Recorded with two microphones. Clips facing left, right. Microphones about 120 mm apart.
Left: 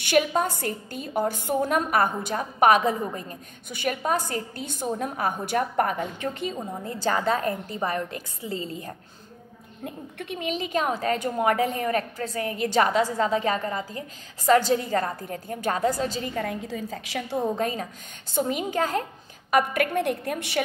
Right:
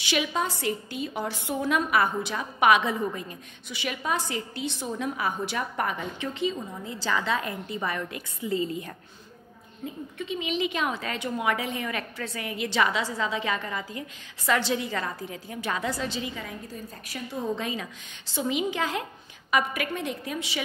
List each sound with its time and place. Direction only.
0.0 s a woman's voice: 50° left (ahead or behind); by 8.9 s 35° left (ahead or behind)
9.8 s a woman's voice: 60° left (ahead or behind)
16.6 s a woman's voice: 90° left
17.6 s a woman's voice: 45° left (ahead or behind)